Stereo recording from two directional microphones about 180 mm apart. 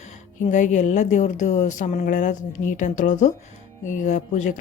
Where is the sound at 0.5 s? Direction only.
45° left (ahead or behind).